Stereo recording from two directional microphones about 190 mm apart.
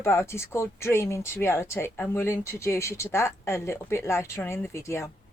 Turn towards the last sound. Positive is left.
turn(degrees=15)  # may be behind; listen again after turning